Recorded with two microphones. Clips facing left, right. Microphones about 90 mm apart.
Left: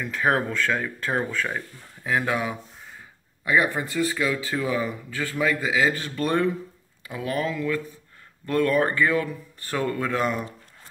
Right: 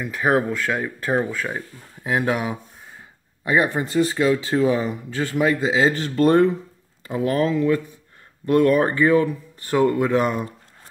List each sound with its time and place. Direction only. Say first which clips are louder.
0.0 s speech: right 3 dB; 10° right (ahead or behind)
2.0 s speech: right 3 dB; 20° right (ahead or behind)